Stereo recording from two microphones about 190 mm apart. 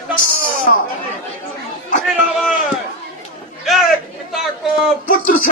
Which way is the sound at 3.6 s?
Centre (ahead or behind).